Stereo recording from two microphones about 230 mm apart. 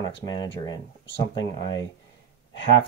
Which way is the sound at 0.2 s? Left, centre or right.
Centre.